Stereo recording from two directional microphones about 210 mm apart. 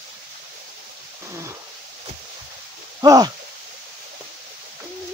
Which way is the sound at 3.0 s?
15° right (ahead or behind).